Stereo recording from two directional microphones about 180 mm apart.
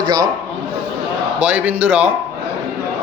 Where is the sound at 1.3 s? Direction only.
10° right (ahead or behind).